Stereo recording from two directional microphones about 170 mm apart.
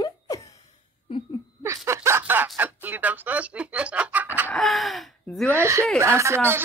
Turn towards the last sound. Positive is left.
turn(degrees=-15)  # may be behind; listen again after turning